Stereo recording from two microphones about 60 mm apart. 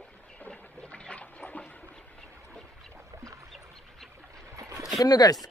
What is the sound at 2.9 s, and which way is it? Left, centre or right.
Boat, right.